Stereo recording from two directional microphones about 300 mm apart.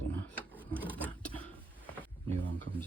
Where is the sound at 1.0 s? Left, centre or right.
Centre.